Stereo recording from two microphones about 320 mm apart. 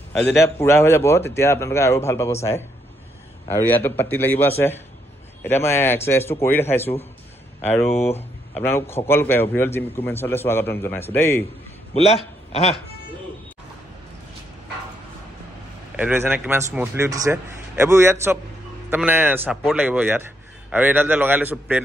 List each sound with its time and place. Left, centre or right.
0.1 s a man's voice: centre
11.9 s a man's voice: centre
16.0 s a man's voice: centre